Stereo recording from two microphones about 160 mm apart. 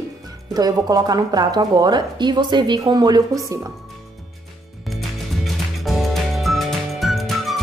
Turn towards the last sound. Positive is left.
turn(degrees=0)  # may be behind; listen again after turning